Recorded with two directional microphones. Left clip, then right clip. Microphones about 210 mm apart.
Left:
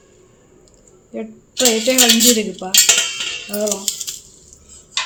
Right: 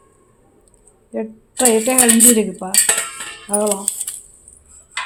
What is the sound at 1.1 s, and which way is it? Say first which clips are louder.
Speech: right 1 dB; 45° right (ahead or behind).